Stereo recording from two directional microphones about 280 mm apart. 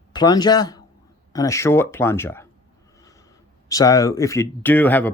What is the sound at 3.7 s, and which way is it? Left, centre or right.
Speech, centre.